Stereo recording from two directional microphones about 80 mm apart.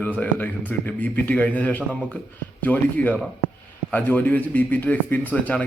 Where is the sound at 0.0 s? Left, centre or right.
Left.